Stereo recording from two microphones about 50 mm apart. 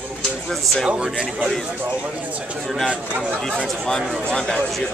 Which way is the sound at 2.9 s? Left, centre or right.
Right.